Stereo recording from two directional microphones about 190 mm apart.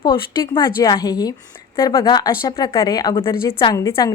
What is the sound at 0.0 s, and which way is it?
A woman's voice, 20° left (ahead or behind).